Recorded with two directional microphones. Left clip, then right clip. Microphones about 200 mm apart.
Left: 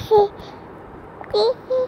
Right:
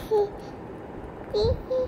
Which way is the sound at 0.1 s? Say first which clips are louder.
Left 9 dB; 25° left (ahead or behind).